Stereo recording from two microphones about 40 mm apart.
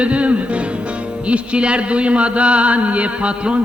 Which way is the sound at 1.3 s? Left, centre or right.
Right.